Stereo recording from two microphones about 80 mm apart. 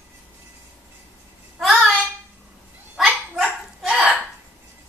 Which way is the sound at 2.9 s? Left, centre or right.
Centre.